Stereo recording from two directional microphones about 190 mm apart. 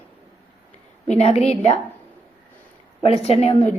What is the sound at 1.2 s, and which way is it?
Speech, 30° left (ahead or behind).